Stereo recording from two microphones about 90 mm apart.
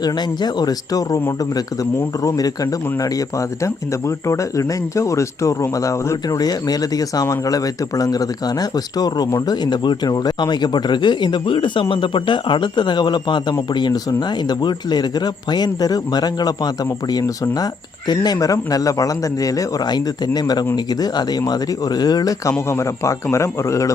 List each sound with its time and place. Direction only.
0.0 s speech: 50° left (ahead or behind)
22.7 s speech: 30° left (ahead or behind)